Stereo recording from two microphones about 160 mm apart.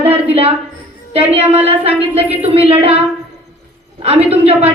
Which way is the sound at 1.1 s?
40° right (ahead or behind).